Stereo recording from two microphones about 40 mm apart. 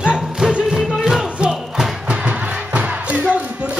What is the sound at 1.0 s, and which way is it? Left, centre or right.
Music, centre.